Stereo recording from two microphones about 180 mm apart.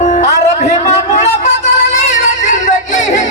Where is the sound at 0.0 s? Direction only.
40° left (ahead or behind).